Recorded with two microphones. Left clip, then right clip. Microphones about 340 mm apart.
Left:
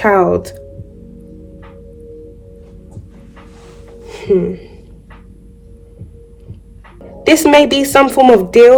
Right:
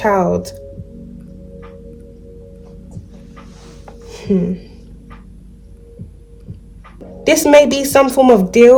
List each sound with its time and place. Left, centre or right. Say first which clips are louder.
0.2 s a woman's voice: left 4 dB; left
4.1 s speech: left 5 dB; left
7.3 s a woman's voice: left 1 dB; left